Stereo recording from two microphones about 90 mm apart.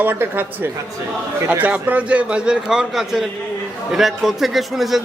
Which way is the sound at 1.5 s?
20° right (ahead or behind).